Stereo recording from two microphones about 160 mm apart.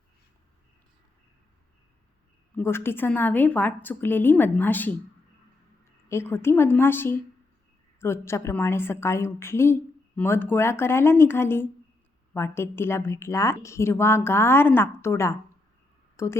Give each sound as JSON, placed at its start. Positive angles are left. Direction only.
{"t": 2.6, "sound": "a woman's voice", "side_deg": 15}
{"t": 6.1, "sound": "a woman's voice", "side_deg": 15}